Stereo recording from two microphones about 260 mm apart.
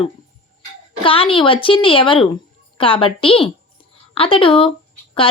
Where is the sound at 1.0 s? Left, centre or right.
Left.